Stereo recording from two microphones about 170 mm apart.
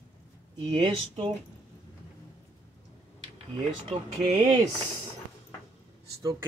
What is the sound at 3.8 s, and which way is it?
Speech, 30° right (ahead or behind).